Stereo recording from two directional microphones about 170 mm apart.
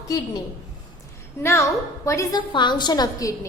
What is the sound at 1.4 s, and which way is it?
A woman's voice, 15° left (ahead or behind).